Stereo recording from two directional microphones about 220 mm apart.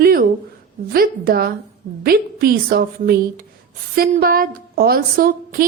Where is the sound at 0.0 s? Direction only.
40° right (ahead or behind).